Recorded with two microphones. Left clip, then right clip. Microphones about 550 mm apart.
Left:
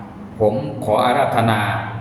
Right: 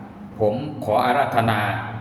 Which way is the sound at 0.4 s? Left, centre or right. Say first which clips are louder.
Left 4 dB; right.